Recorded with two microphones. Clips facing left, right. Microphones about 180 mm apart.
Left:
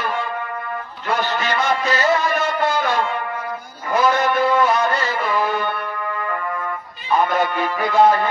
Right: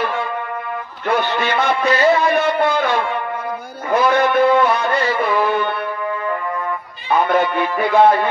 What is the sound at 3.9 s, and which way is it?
Music, 55° right (ahead or behind).